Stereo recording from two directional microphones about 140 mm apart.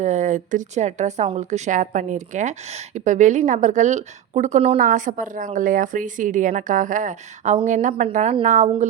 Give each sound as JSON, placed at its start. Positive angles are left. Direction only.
{"t": 0.0, "sound": "a woman's voice", "side_deg": -60}
{"t": 4.8, "sound": "a woman's voice", "side_deg": -65}